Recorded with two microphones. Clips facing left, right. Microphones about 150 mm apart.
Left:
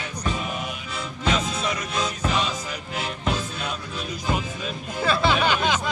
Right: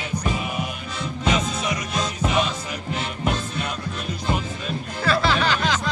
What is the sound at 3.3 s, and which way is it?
Music, centre (ahead or behind).